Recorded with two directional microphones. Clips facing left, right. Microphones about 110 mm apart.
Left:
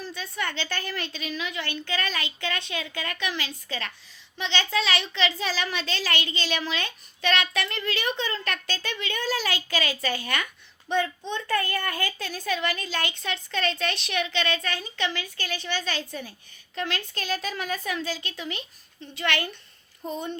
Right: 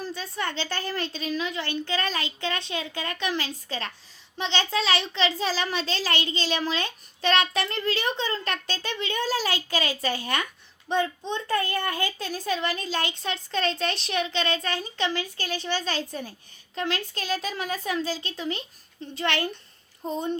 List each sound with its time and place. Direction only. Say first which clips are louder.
0.0 s a woman's voice: right 1 dB; 35° right (ahead or behind)